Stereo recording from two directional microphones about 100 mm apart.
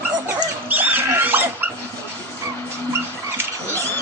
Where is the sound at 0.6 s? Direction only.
20° right (ahead or behind).